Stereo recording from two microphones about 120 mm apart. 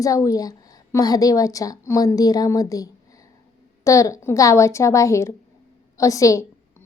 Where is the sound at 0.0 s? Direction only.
30° left (ahead or behind).